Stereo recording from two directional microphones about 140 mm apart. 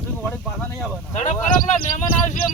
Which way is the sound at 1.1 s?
55° left (ahead or behind).